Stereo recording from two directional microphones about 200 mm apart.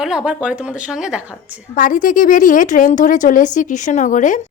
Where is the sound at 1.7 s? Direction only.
40° left (ahead or behind).